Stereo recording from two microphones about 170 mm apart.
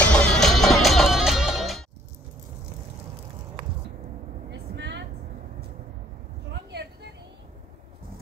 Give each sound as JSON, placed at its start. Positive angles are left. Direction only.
{"t": 0.0, "sound": "music", "side_deg": 5}
{"t": 4.5, "sound": "vehicle", "side_deg": -90}
{"t": 6.7, "sound": "a sound", "side_deg": -80}